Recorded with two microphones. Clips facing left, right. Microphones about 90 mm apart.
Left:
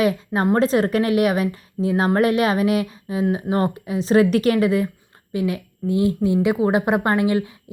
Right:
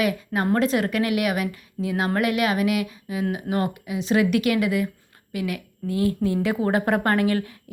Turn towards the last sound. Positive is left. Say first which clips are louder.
# left 2 dB
turn(degrees=20)  # may be behind; listen again after turning